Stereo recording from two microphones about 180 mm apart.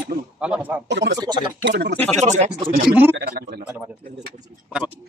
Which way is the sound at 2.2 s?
40° right (ahead or behind).